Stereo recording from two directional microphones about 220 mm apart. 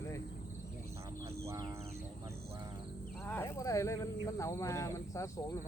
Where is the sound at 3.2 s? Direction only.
10° left (ahead or behind).